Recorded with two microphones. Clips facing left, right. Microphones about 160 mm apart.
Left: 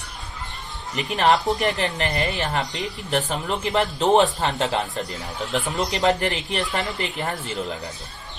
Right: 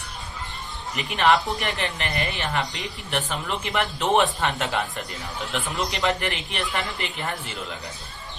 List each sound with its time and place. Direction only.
0.9 s speech: 35° left (ahead or behind)
4.5 s speech: 25° left (ahead or behind)
5.5 s speech: 40° left (ahead or behind)